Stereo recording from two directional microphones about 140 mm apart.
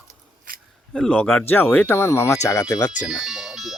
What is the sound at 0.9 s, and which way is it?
Speech, 5° left (ahead or behind).